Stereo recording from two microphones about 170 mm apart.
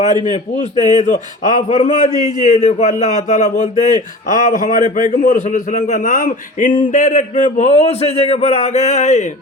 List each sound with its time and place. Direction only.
0.0 s a man's voice: 25° right (ahead or behind)
0.3 s a man's voice: 40° left (ahead or behind)
0.8 s a man's voice: 25° right (ahead or behind)
1.0 s a man's voice: 45° left (ahead or behind)